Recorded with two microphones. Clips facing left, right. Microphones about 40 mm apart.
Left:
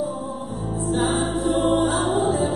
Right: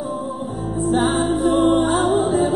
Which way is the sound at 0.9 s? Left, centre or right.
Centre.